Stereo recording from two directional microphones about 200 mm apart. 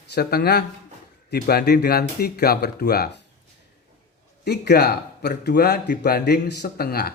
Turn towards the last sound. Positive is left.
turn(degrees=50)  # may be behind; listen again after turning